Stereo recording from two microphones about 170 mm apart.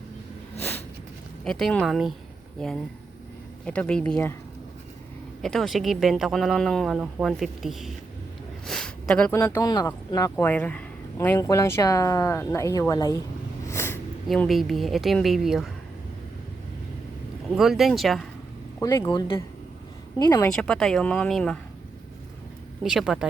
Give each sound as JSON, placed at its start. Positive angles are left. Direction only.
{"t": 1.5, "sound": "speech", "side_deg": 5}
{"t": 3.7, "sound": "speech", "side_deg": 5}
{"t": 5.4, "sound": "speech", "side_deg": 0}
{"t": 8.6, "sound": "a sound", "side_deg": 5}
{"t": 9.3, "sound": "speech", "side_deg": 15}
{"t": 13.7, "sound": "a sound", "side_deg": 15}
{"t": 14.3, "sound": "speech", "side_deg": 0}
{"t": 17.5, "sound": "speech", "side_deg": 0}
{"t": 18.8, "sound": "speech", "side_deg": 15}
{"t": 19.0, "sound": "speech", "side_deg": 30}
{"t": 20.6, "sound": "speech", "side_deg": 5}
{"t": 22.8, "sound": "speech", "side_deg": 0}